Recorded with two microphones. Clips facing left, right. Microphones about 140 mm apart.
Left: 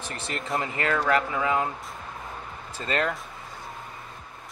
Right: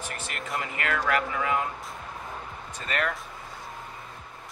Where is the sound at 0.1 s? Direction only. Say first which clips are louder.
Left 6 dB; 30° left (ahead or behind).